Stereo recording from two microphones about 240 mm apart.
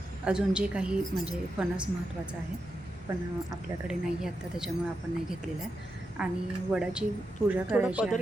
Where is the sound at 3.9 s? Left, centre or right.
Centre.